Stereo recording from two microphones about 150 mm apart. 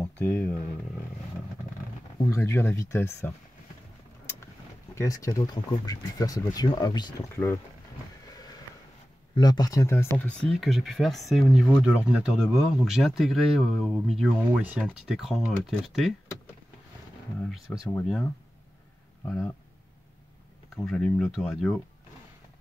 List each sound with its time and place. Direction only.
0.0 s speech: 10° left (ahead or behind)
2.2 s speech: 20° left (ahead or behind)
4.9 s speech: 20° left (ahead or behind)
8.3 s a sound: 25° left (ahead or behind)
9.3 s speech: 25° left (ahead or behind); by 16.2 s centre (ahead or behind)
17.5 s speech: centre (ahead or behind)
20.7 s speech: 5° left (ahead or behind)